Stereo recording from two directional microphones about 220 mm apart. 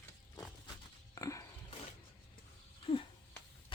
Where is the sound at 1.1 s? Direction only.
15° left (ahead or behind).